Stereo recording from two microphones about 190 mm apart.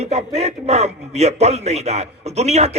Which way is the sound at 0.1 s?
35° right (ahead or behind).